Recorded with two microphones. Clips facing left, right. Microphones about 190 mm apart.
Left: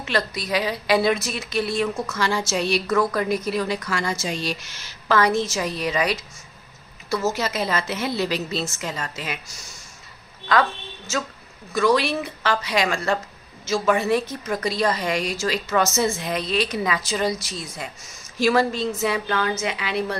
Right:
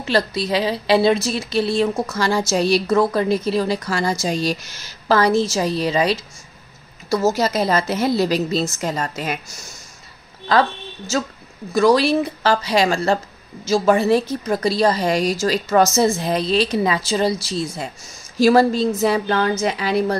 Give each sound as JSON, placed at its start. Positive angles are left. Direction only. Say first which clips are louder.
{"t": 0.0, "sound": "a woman's voice", "louder": "right 6 dB", "side_deg": -30}
{"t": 10.5, "sound": "a woman's voice", "louder": "right 3 dB", "side_deg": -30}